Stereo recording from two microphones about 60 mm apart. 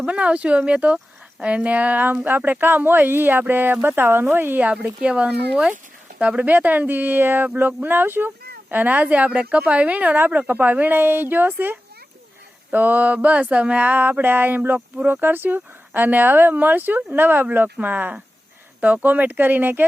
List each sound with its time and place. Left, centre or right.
0.0 s speech: right
4.6 s speech: right